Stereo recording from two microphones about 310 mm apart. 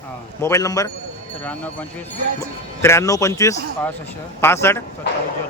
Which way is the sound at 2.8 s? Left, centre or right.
Centre.